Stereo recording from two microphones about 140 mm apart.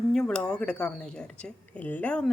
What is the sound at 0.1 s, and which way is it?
Speech, 5° left (ahead or behind).